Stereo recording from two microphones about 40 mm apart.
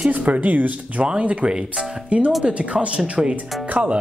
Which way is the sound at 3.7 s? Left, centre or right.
Right.